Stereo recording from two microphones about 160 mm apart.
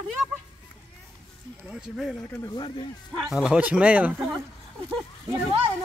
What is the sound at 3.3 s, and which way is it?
Speech, 5° right (ahead or behind).